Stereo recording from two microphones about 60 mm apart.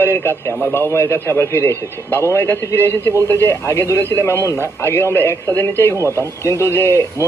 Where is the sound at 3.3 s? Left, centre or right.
Right.